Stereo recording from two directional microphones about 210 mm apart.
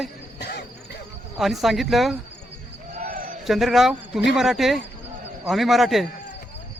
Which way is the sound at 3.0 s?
40° right (ahead or behind).